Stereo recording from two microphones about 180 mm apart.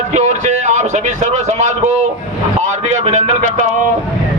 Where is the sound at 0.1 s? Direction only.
40° right (ahead or behind).